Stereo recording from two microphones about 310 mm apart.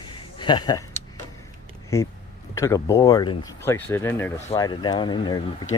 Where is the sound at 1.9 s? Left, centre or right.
Centre.